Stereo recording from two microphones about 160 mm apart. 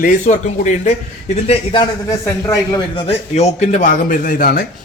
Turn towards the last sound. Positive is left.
turn(degrees=65)  # may be behind; listen again after turning